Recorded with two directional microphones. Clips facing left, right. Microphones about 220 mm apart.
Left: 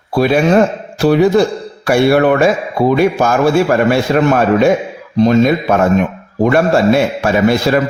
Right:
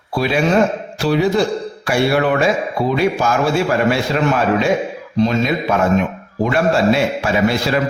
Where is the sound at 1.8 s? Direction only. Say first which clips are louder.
Left 6 dB; 50° left (ahead or behind).